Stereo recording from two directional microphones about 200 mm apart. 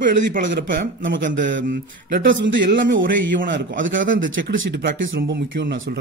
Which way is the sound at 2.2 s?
70° right (ahead or behind).